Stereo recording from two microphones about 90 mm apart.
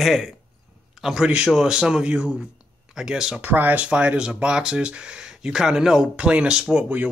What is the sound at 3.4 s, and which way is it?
Speech, 20° right (ahead or behind).